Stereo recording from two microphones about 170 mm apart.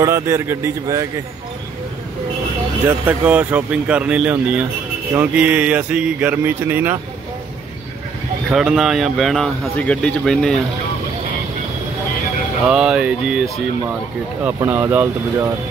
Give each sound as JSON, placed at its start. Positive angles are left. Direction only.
{"t": 0.0, "sound": "speech", "side_deg": -15}
{"t": 2.9, "sound": "speech", "side_deg": -10}
{"t": 8.5, "sound": "speech", "side_deg": -5}
{"t": 12.6, "sound": "speech", "side_deg": -5}